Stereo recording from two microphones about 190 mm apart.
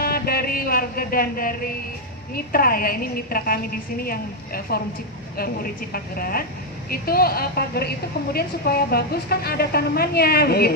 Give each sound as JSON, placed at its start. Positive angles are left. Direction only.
{"t": 0.0, "sound": "music", "side_deg": 55}
{"t": 2.3, "sound": "a woman's voice", "side_deg": 50}
{"t": 5.4, "sound": "a woman's voice", "side_deg": 50}